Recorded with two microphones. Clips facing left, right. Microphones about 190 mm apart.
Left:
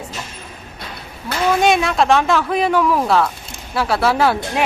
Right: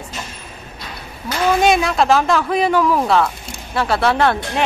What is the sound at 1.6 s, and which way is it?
A woman's voice, centre (ahead or behind).